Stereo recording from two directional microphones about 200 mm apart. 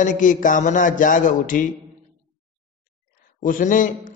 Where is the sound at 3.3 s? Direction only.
40° left (ahead or behind).